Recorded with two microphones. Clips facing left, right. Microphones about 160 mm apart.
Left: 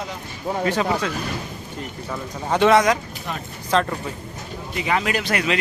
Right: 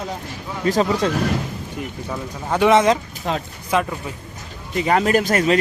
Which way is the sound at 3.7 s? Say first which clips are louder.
Even; 10° right (ahead or behind).